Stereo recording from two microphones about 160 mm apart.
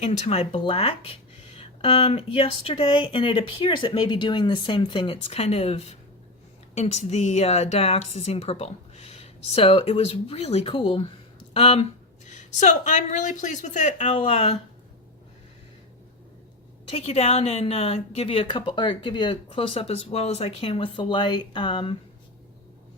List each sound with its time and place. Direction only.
0.0 s a woman's voice: 40° left (ahead or behind)
16.9 s a woman's voice: 40° left (ahead or behind)